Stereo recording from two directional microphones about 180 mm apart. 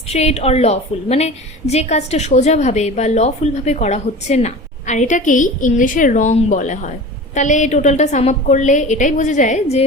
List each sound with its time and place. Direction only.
0.1 s a woman's voice: 35° left (ahead or behind)